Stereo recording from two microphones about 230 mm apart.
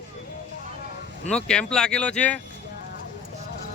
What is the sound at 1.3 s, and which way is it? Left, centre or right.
Speech, centre.